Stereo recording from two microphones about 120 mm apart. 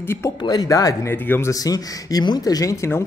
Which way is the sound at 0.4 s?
35° left (ahead or behind).